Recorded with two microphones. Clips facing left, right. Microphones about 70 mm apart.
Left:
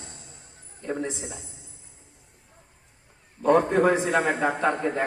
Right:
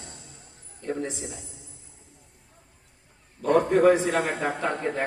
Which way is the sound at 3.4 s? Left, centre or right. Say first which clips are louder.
Right 1 dB; left.